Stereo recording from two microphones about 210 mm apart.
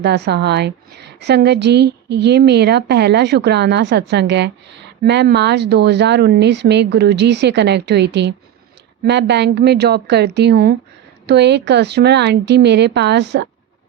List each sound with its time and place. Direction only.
0.0 s a woman's voice: 55° right (ahead or behind)